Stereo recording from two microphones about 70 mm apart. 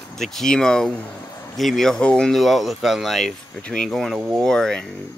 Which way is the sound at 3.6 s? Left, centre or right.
Centre.